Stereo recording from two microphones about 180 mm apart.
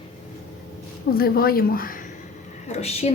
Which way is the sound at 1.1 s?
55° left (ahead or behind).